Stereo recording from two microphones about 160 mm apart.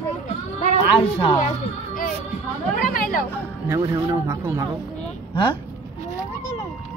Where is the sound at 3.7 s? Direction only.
15° right (ahead or behind).